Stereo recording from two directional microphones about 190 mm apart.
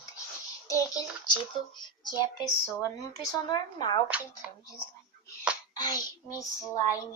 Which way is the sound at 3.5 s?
20° left (ahead or behind).